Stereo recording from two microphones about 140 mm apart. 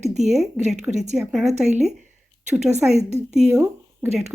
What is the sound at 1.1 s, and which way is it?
Speech, 5° right (ahead or behind).